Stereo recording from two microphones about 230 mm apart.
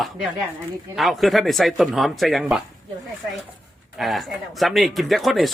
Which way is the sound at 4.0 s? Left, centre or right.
Centre.